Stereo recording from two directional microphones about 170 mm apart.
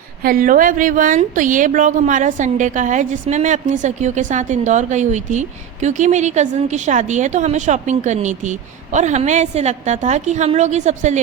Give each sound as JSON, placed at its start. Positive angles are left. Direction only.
{"t": 0.2, "sound": "a woman's voice", "side_deg": -55}